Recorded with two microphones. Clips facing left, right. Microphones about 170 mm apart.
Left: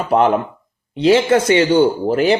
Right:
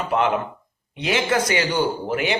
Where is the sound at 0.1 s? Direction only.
40° left (ahead or behind).